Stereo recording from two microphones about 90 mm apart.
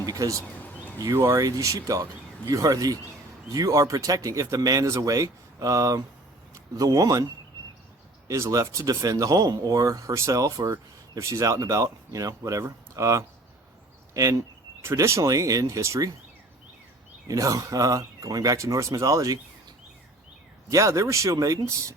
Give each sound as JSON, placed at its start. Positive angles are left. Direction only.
{"t": 0.0, "sound": "speech", "side_deg": -40}
{"t": 0.6, "sound": "a sound", "side_deg": 20}
{"t": 1.0, "sound": "speech", "side_deg": -35}
{"t": 8.3, "sound": "speech", "side_deg": -35}
{"t": 17.2, "sound": "speech", "side_deg": -40}
{"t": 20.7, "sound": "speech", "side_deg": -35}